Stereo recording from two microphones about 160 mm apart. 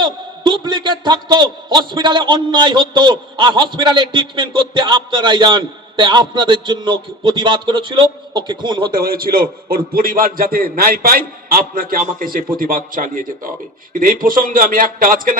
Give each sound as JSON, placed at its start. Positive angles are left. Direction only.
{"t": 0.0, "sound": "a man's voice", "side_deg": -30}
{"t": 8.9, "sound": "a man's voice", "side_deg": -65}